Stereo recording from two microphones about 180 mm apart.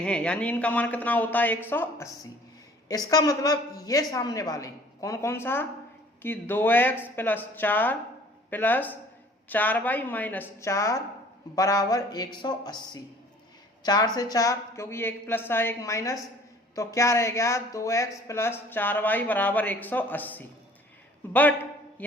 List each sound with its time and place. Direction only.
0.0 s a woman's voice: 5° left (ahead or behind)